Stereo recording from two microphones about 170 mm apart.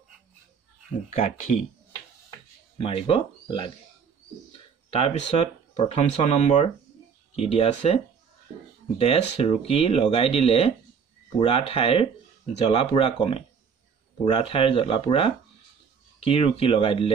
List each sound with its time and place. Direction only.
1.1 s speech: 50° left (ahead or behind)
2.8 s speech: 30° left (ahead or behind)